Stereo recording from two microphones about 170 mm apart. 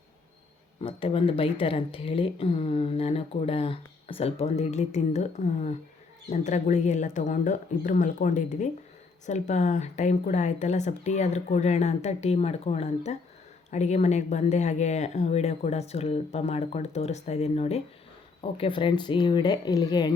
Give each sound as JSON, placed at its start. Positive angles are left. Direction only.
{"t": 0.8, "sound": "speech", "side_deg": 30}